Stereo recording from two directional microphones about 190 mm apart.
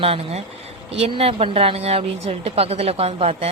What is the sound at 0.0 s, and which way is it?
Speech, 30° right (ahead or behind).